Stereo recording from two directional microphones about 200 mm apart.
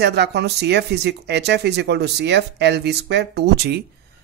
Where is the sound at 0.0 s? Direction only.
55° right (ahead or behind).